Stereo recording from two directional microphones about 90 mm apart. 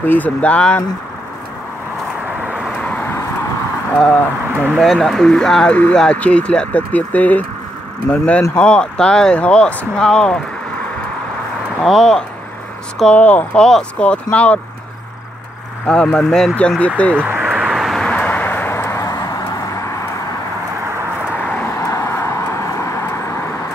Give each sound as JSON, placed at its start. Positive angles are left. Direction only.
{"t": 0.0, "sound": "speech", "side_deg": 20}
{"t": 2.4, "sound": "vehicle", "side_deg": -10}
{"t": 2.8, "sound": "vehicle", "side_deg": 15}
{"t": 4.9, "sound": "speech", "side_deg": 5}
{"t": 11.8, "sound": "speech", "side_deg": 5}
{"t": 15.9, "sound": "speech", "side_deg": 10}
{"t": 17.2, "sound": "vehicle", "side_deg": -20}
{"t": 17.5, "sound": "vehicle", "side_deg": -10}
{"t": 21.5, "sound": "vehicle", "side_deg": 35}